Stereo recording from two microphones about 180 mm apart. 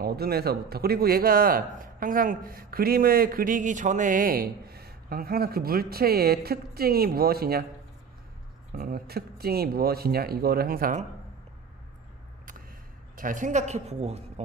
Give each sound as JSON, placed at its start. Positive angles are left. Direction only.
{"t": 0.0, "sound": "a man's voice", "side_deg": -60}
{"t": 8.7, "sound": "a man's voice", "side_deg": -55}
{"t": 13.1, "sound": "speech", "side_deg": -50}